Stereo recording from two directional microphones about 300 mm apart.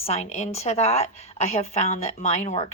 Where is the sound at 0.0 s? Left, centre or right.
Left.